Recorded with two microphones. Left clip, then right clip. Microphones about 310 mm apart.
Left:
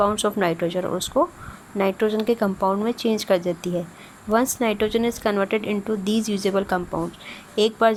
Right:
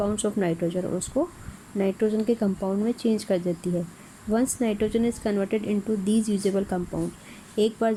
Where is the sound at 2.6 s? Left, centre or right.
Left.